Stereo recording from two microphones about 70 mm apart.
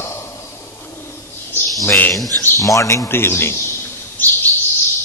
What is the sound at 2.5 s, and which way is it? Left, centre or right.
A man's voice, left.